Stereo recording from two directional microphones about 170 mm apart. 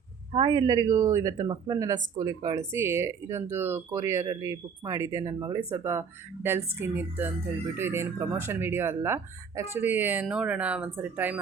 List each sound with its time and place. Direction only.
0.3 s speech: 30° right (ahead or behind); by 11.3 s 10° right (ahead or behind)